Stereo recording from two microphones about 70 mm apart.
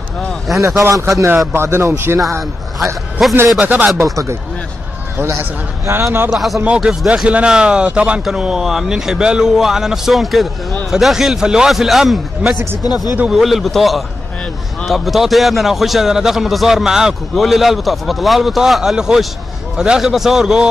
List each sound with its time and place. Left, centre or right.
0.5 s speech: centre
0.8 s a man's voice: right
3.2 s speech: centre
3.6 s speech: right
4.1 s speech: right
5.4 s a man's voice: right
6.3 s speech: centre
6.6 s speech: centre
12.4 s speech: centre
12.8 s speech: left
13.3 s speech: centre